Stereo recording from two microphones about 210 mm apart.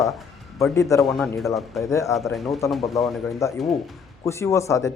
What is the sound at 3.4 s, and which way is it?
Speech, 15° left (ahead or behind).